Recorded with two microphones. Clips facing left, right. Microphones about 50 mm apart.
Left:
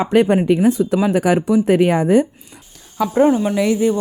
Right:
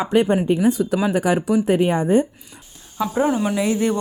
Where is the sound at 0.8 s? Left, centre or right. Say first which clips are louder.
Left 3 dB; centre.